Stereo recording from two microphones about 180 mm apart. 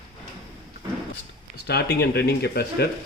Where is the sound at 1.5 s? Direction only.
65° left (ahead or behind).